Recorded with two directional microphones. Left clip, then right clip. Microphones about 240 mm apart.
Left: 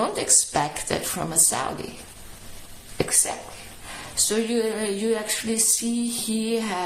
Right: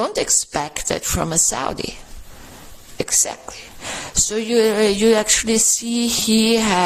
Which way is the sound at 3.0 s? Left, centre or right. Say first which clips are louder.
Right 4 dB; right.